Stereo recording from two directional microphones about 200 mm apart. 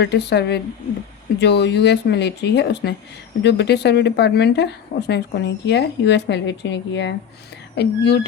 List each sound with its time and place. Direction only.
0.0 s speech: 60° left (ahead or behind)